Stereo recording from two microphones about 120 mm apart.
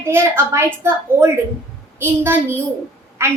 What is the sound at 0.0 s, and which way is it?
A woman's voice, 20° right (ahead or behind).